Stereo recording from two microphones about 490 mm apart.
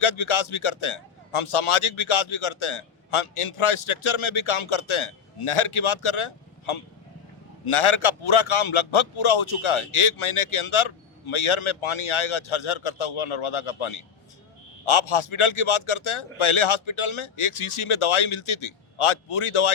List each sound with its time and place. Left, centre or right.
0.0 s a man's voice: left